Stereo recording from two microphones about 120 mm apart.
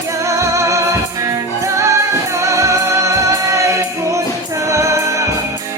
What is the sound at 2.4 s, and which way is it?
Music, 25° right (ahead or behind).